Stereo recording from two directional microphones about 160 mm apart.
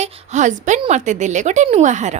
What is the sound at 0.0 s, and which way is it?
A woman's voice, 50° right (ahead or behind).